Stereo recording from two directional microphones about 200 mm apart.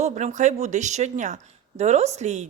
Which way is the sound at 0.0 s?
35° right (ahead or behind).